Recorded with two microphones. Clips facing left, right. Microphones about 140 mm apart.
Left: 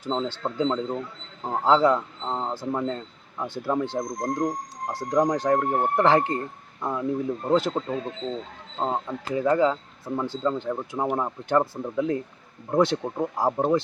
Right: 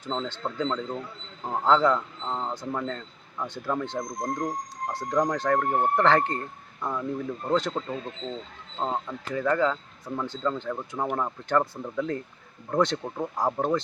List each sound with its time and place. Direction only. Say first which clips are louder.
0.1 s speech: left 3 dB; 15° left (ahead or behind)